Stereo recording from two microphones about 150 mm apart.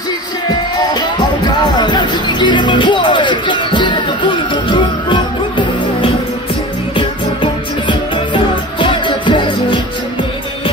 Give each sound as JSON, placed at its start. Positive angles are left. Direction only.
{"t": 1.6, "sound": "music", "side_deg": 30}
{"t": 8.7, "sound": "music", "side_deg": 35}